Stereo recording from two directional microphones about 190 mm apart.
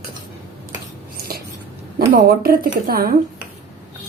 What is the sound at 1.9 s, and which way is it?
Speech, 50° right (ahead or behind).